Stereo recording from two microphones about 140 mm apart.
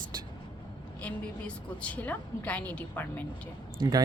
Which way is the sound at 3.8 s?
30° right (ahead or behind).